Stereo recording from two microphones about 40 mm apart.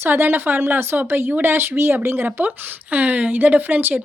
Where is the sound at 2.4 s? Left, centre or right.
Right.